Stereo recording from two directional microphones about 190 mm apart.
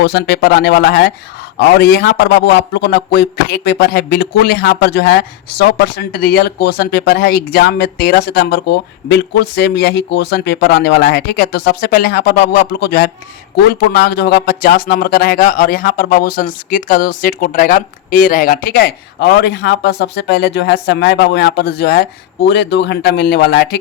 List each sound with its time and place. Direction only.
0.0 s a man's voice: 60° left (ahead or behind)
22.4 s a man's voice: 65° left (ahead or behind)